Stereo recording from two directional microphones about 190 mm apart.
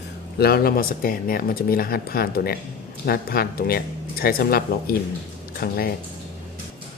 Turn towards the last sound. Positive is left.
turn(degrees=50)  # may be behind; listen again after turning